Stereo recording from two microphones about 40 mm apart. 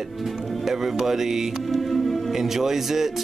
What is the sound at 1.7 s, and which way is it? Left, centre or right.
Music, centre.